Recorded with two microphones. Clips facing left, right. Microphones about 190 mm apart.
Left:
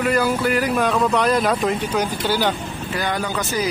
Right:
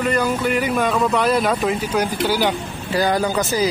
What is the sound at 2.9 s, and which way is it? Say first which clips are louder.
Speech: right 6 dB; 35° right (ahead or behind).